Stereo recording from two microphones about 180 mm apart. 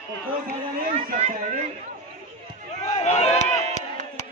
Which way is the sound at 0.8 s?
50° right (ahead or behind).